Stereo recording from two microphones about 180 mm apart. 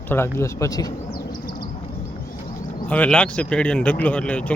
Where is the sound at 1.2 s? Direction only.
25° left (ahead or behind).